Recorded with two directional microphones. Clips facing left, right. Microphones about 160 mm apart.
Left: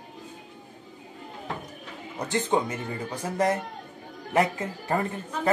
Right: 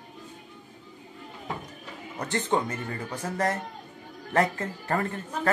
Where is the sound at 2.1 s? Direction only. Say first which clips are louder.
Left 2 dB; 15° left (ahead or behind).